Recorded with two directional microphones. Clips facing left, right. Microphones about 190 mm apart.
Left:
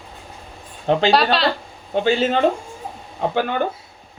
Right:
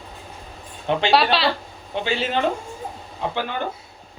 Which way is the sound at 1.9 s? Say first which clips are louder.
Left 6 dB; 45° left (ahead or behind).